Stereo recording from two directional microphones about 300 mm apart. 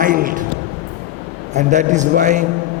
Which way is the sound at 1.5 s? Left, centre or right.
Right.